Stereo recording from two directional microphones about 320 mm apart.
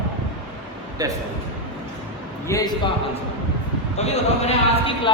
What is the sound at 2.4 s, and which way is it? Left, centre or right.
Speech, centre.